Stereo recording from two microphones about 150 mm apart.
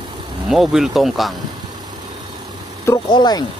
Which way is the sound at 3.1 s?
30° left (ahead or behind).